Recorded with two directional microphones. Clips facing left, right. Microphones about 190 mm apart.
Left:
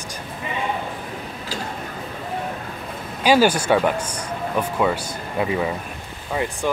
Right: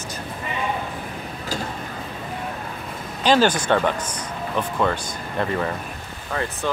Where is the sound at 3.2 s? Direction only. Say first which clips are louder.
Left 2 dB; 10° left (ahead or behind).